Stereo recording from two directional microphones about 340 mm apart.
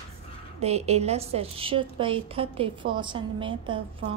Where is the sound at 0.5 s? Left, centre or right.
Centre.